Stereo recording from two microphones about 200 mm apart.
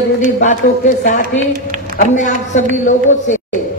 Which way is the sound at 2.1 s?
40° left (ahead or behind).